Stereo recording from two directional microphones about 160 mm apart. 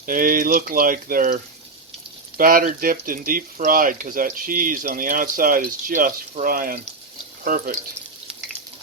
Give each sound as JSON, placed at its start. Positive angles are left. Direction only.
{"t": 0.0, "sound": "speech", "side_deg": -60}
{"t": 2.4, "sound": "speech", "side_deg": -65}